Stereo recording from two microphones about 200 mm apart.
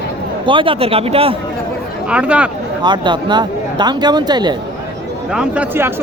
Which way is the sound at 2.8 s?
20° right (ahead or behind).